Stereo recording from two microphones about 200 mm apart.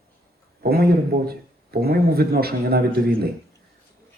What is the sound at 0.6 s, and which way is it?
Speech, 50° right (ahead or behind).